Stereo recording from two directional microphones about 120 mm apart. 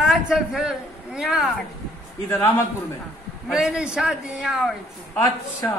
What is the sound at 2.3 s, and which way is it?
Speech, 20° left (ahead or behind).